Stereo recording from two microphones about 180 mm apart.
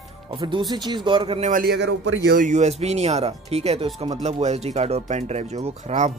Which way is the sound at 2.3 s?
40° right (ahead or behind).